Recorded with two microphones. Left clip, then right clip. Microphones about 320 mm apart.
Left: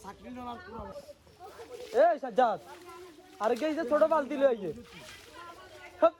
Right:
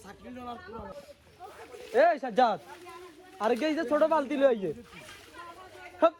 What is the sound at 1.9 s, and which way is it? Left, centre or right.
Speech, right.